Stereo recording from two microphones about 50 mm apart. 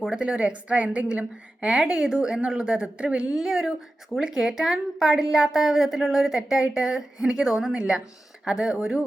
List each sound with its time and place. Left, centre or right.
0.1 s a woman's voice: centre
1.8 s speech: centre